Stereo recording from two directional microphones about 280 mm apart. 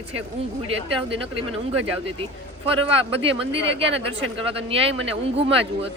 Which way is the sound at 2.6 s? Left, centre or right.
Centre.